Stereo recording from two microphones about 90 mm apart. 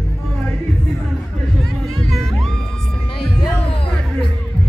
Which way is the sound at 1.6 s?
Centre (ahead or behind).